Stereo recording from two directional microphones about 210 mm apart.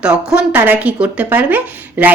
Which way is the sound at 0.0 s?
5° right (ahead or behind).